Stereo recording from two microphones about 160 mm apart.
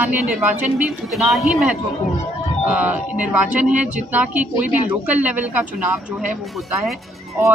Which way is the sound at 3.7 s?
50° right (ahead or behind).